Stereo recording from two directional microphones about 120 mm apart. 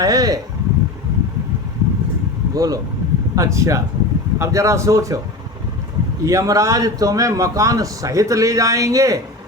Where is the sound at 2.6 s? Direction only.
30° right (ahead or behind).